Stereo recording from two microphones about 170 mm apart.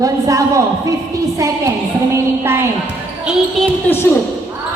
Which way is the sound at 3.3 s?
5° right (ahead or behind).